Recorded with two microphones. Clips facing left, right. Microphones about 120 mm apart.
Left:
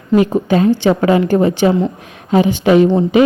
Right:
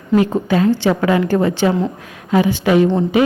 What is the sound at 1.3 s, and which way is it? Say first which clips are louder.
A woman's voice: left 3 dB; 15° left (ahead or behind).